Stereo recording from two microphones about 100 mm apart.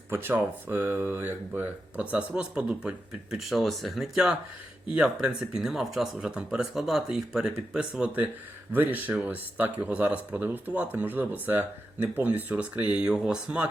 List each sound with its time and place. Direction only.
0.1 s speech: 20° right (ahead or behind)